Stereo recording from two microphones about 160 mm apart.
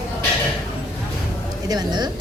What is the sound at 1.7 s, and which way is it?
Speech, 25° right (ahead or behind).